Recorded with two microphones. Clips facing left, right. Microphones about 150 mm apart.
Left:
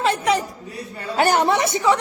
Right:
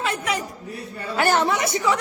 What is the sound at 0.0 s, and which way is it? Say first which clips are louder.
Speech: left 6 dB; 35° left (ahead or behind).